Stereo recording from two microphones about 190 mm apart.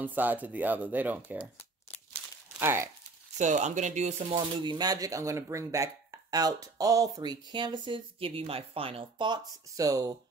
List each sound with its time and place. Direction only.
0.0 s speech: 10° right (ahead or behind)
2.6 s speech: 10° right (ahead or behind)
3.3 s speech: 40° right (ahead or behind); by 10.1 s 20° right (ahead or behind)